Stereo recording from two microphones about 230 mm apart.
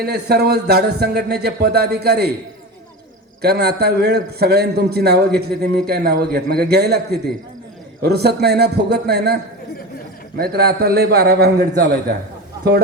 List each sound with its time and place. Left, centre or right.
0.0 s a man's voice: right
3.4 s a man's voice: right